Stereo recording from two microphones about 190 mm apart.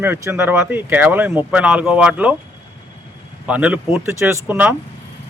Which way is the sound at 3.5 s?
5° right (ahead or behind).